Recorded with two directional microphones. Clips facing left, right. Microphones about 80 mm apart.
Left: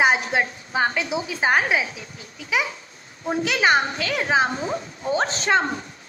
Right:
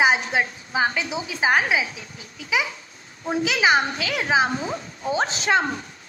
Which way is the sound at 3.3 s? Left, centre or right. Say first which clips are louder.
Even; centre.